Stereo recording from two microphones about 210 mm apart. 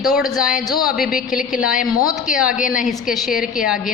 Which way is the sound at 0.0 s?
Centre (ahead or behind).